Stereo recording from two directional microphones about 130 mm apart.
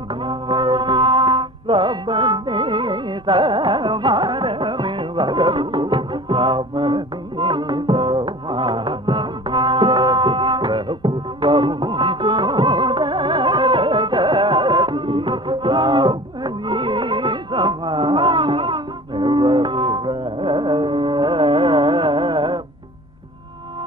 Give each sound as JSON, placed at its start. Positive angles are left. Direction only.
{"t": 0.3, "sound": "music", "side_deg": -35}